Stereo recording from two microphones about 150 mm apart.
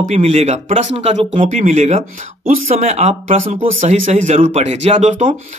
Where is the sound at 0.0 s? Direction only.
50° right (ahead or behind).